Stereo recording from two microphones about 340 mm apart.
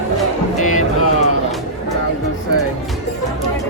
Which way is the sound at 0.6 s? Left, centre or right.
Left.